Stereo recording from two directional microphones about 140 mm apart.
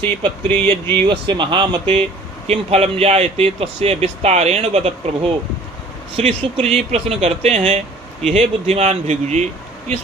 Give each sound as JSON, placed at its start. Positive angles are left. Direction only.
{"t": 0.4, "sound": "speech", "side_deg": 10}
{"t": 1.0, "sound": "speech", "side_deg": -35}
{"t": 2.5, "sound": "speech", "side_deg": -50}